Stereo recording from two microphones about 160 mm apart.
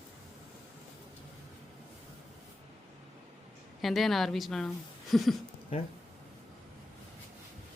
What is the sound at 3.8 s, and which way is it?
A woman's voice, centre (ahead or behind).